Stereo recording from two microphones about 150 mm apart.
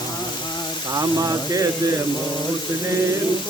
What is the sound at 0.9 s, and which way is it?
Music, 25° right (ahead or behind).